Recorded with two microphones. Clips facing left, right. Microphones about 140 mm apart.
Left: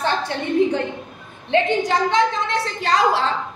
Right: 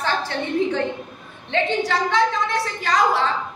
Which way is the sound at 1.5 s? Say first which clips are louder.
Left 3 dB; 15° left (ahead or behind).